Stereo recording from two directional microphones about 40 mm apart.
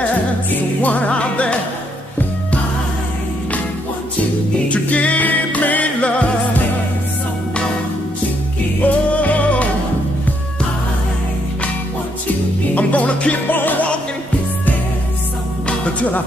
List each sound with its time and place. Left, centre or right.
0.5 s music: left
4.6 s music: left
8.8 s music: left
12.7 s music: left
13.5 s music: left
15.6 s music: left